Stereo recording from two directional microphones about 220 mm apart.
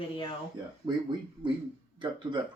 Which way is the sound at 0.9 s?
20° right (ahead or behind).